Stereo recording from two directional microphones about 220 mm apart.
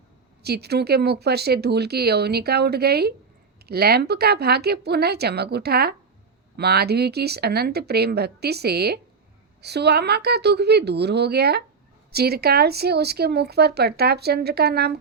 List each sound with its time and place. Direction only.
0.4 s speech: 45° right (ahead or behind)